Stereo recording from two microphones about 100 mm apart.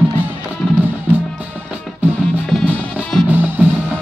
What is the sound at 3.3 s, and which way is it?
Music, 15° right (ahead or behind).